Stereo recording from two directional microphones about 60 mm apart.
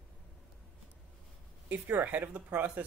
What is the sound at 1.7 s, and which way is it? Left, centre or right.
Speech, right.